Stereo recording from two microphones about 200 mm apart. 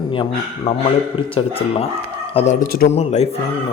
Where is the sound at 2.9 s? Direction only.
30° left (ahead or behind).